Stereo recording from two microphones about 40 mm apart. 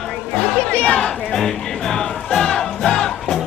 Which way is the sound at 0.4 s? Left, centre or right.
Left.